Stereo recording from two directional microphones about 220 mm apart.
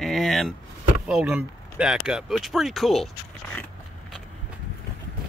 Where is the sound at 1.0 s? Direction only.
5° right (ahead or behind).